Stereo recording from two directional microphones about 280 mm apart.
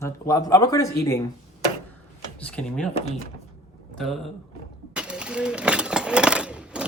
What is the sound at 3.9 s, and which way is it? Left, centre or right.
Speech, centre.